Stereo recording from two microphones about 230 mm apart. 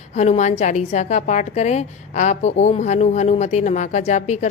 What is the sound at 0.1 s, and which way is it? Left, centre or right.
A woman's voice, left.